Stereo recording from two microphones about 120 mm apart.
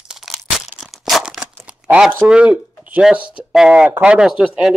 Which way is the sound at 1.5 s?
5° right (ahead or behind).